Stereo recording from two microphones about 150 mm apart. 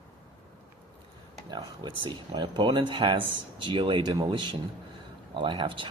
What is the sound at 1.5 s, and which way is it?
Speech, 30° right (ahead or behind).